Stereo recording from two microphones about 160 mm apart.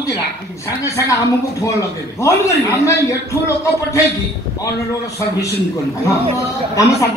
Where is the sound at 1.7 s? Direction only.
20° left (ahead or behind).